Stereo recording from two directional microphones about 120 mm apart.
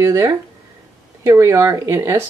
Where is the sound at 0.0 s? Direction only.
25° right (ahead or behind).